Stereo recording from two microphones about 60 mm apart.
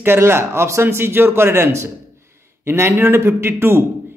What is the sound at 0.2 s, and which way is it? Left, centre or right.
A man's voice, right.